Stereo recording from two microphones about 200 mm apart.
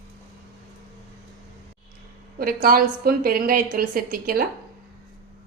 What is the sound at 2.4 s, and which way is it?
A woman's voice, 45° right (ahead or behind).